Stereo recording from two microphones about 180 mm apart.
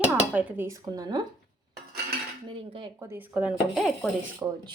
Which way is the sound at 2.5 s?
25° right (ahead or behind).